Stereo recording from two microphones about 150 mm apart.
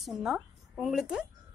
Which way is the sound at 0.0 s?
Centre (ahead or behind).